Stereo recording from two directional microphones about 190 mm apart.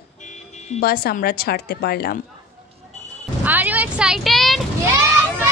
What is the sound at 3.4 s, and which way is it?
Vehicle, 10° right (ahead or behind).